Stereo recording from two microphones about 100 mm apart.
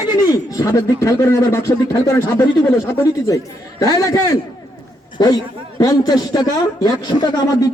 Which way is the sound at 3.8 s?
40° left (ahead or behind).